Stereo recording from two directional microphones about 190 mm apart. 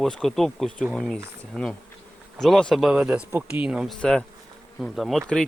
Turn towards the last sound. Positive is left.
turn(degrees=0)  # may be behind; listen again after turning